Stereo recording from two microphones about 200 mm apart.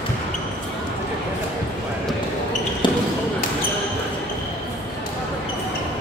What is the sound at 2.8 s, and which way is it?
Basketball bounce, 20° left (ahead or behind).